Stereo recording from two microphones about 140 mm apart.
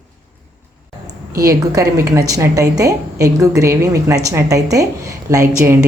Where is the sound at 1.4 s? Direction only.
25° right (ahead or behind).